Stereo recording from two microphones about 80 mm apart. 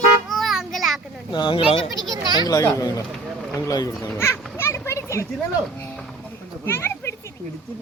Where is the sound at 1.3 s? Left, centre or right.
Left.